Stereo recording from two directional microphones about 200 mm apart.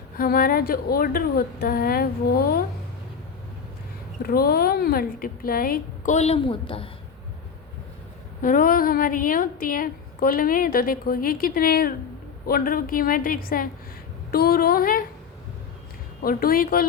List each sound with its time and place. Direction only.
0.2 s a woman's voice: 50° left (ahead or behind)
4.2 s a woman's voice: 50° left (ahead or behind); by 6.8 s 25° left (ahead or behind)
8.4 s a woman's voice: 45° left (ahead or behind)
16.2 s a woman's voice: 45° left (ahead or behind)